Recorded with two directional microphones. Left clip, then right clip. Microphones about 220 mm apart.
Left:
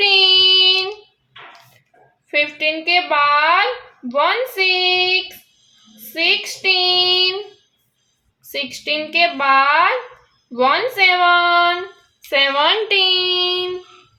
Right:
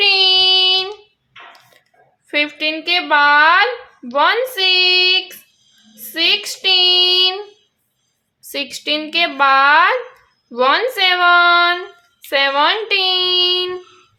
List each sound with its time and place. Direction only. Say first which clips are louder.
0.0 s child singing: even; 25° right (ahead or behind)
2.3 s a woman's voice: even; 25° right (ahead or behind)
6.1 s a woman's voice: right 1 dB; 30° right (ahead or behind)
8.4 s a woman's voice: right 1 dB; 25° right (ahead or behind)